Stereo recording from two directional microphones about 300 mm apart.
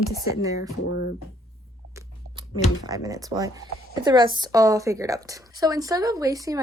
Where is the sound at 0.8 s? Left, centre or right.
Left.